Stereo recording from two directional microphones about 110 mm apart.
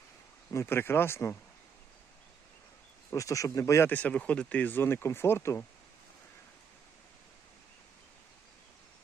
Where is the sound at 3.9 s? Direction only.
10° left (ahead or behind).